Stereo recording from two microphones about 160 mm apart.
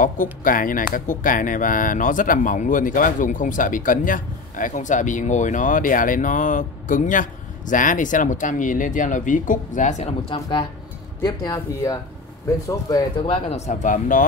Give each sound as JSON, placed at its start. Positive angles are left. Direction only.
{"t": 0.0, "sound": "speech", "side_deg": 55}
{"t": 11.2, "sound": "speech", "side_deg": 20}
{"t": 13.2, "sound": "speech", "side_deg": 40}